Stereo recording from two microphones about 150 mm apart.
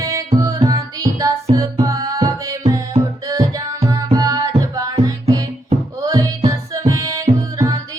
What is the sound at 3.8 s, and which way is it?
Tabla, 25° right (ahead or behind).